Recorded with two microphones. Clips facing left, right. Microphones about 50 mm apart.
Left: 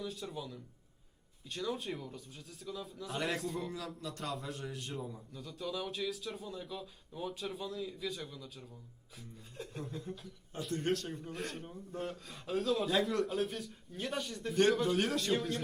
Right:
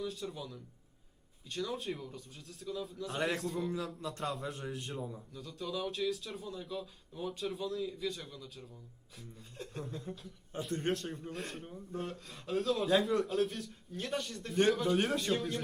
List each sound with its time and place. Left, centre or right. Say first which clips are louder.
0.0 s a man's voice: right 1 dB; centre
4.0 s speech: right 3 dB; centre
4.9 s a man's voice: right 1 dB; centre
10.5 s a man's voice: even; centre